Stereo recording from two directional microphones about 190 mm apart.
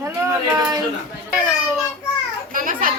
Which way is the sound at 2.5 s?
45° right (ahead or behind).